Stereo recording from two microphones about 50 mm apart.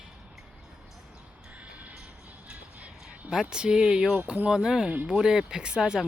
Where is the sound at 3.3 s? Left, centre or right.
Centre.